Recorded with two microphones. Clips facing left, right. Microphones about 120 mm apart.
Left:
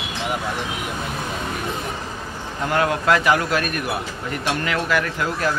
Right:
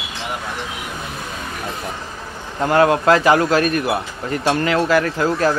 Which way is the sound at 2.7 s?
35° right (ahead or behind).